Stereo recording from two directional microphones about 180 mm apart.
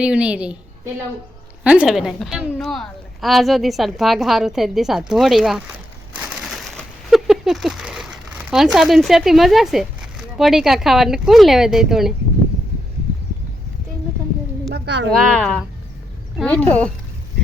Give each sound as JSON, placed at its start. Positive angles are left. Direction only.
{"t": 0.0, "sound": "a woman's voice", "side_deg": -5}
{"t": 1.6, "sound": "a woman's voice", "side_deg": -5}
{"t": 6.1, "sound": "crushing", "side_deg": -5}
{"t": 10.3, "sound": "a woman's voice", "side_deg": 0}
{"t": 14.7, "sound": "a sound", "side_deg": -75}
{"t": 15.3, "sound": "a woman's voice", "side_deg": 5}